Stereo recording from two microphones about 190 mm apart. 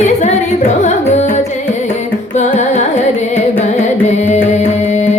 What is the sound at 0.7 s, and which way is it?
Carnatic music, 35° left (ahead or behind).